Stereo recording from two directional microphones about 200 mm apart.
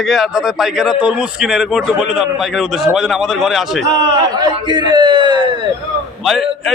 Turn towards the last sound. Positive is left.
turn(degrees=0)  # may be behind; listen again after turning